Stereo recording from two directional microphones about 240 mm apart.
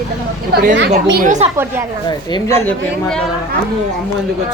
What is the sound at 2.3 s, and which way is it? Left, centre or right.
Speech, centre.